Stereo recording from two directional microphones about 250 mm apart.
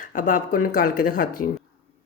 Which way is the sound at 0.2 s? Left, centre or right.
Left.